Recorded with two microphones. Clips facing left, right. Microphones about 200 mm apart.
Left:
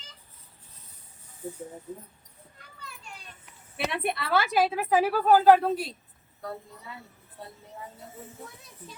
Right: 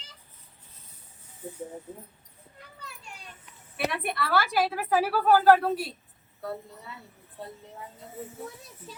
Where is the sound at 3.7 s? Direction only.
25° left (ahead or behind).